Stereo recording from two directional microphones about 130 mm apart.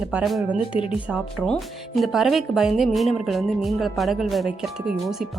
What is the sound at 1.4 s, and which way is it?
Speech, 5° left (ahead or behind).